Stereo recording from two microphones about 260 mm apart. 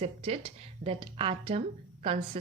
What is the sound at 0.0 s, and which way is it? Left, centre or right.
A woman's voice, right.